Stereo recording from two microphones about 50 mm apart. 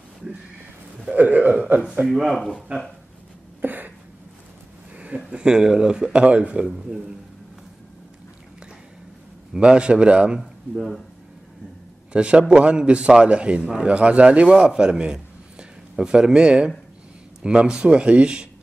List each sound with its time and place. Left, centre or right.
1.1 s a man's voice: right
2.0 s speech: centre
3.6 s a sound: right
4.9 s speech: right
6.2 s a man's voice: right
9.5 s a man's voice: centre
12.1 s a man's voice: centre